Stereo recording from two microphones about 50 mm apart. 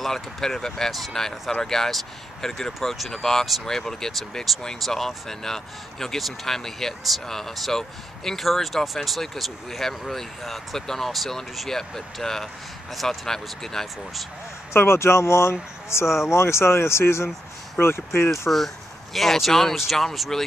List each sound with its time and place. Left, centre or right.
0.0 s speech: centre
14.7 s speech: left
19.1 s speech: centre